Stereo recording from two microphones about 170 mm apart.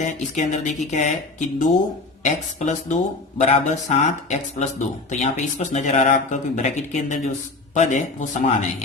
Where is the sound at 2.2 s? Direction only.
45° left (ahead or behind).